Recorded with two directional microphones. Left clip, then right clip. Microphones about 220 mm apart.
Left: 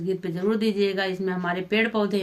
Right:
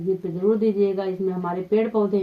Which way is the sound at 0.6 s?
20° left (ahead or behind).